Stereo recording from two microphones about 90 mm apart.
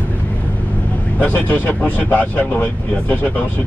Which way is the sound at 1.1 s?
15° left (ahead or behind).